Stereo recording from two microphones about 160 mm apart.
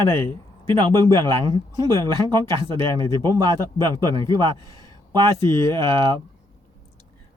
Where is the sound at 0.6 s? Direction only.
30° right (ahead or behind).